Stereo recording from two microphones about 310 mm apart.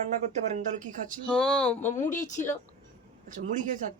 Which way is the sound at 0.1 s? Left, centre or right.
Right.